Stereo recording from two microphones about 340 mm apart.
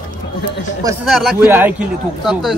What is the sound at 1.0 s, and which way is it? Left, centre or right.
Speech, centre.